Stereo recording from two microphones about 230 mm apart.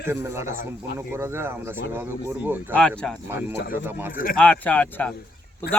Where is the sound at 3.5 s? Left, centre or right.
Left.